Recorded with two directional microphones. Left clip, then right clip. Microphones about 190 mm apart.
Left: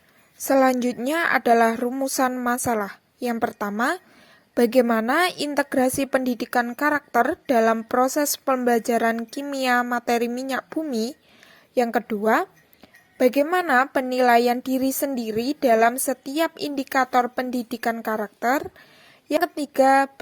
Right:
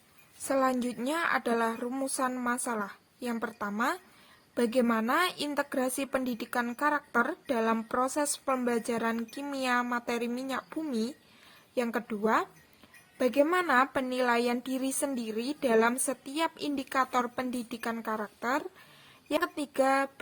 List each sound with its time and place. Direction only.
0.4 s speech: 30° left (ahead or behind)